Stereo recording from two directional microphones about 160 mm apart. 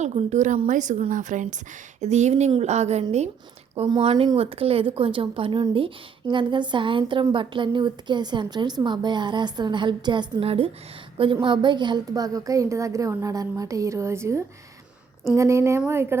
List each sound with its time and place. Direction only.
0.0 s a woman's voice: 45° right (ahead or behind); by 16.1 s 15° right (ahead or behind)